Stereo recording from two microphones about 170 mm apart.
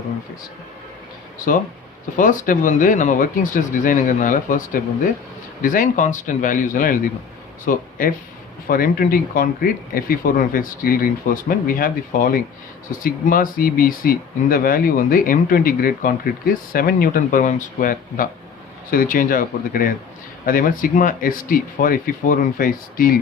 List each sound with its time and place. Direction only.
2.1 s speech: 50° left (ahead or behind)